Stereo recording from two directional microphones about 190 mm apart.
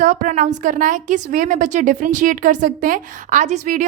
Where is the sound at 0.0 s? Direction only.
40° right (ahead or behind).